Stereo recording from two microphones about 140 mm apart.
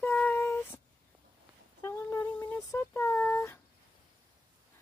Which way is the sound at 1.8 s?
20° left (ahead or behind).